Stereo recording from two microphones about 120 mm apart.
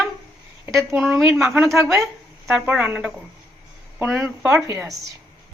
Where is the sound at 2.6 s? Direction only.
10° right (ahead or behind).